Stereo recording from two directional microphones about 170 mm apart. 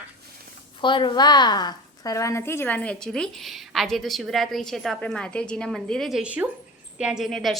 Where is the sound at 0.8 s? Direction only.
30° left (ahead or behind).